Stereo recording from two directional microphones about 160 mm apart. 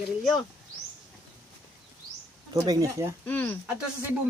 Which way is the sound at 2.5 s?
20° right (ahead or behind).